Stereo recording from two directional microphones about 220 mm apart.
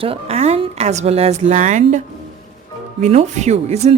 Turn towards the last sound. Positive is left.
turn(degrees=-30)  # may be behind; listen again after turning